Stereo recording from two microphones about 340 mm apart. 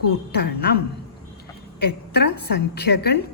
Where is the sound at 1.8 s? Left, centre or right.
Left.